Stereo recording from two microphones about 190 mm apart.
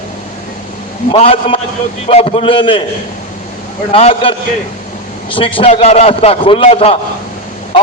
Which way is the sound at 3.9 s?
30° left (ahead or behind).